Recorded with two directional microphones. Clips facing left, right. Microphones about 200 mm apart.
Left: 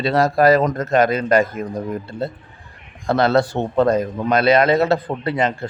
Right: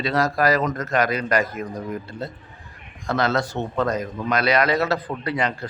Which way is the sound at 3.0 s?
30° left (ahead or behind).